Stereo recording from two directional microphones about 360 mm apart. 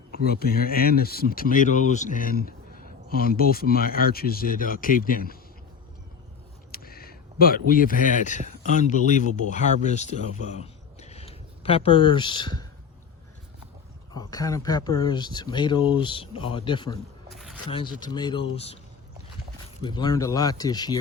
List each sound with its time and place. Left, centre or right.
0.3 s speech: left
6.7 s speech: left
14.1 s speech: centre
17.3 s a sound: centre
17.7 s speech: centre
19.8 s speech: centre